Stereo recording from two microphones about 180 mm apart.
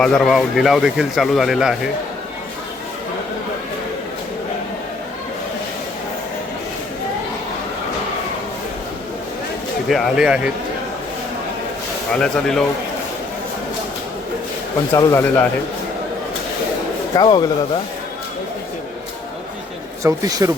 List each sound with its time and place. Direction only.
0.0 s speech: centre (ahead or behind)
9.9 s speech: centre (ahead or behind)
12.1 s speech: 5° left (ahead or behind)
14.9 s speech: 15° left (ahead or behind)
17.2 s speech: 25° left (ahead or behind)
20.0 s speech: 20° right (ahead or behind)